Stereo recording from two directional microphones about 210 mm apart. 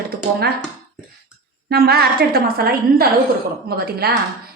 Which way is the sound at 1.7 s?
50° right (ahead or behind).